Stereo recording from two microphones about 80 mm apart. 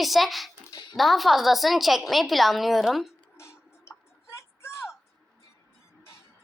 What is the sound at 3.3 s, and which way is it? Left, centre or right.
Tick-tock, left.